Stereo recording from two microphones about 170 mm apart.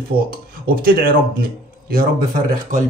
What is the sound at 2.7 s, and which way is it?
Speech, 50° right (ahead or behind).